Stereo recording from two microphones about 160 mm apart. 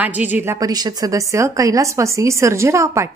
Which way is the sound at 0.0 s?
10° right (ahead or behind).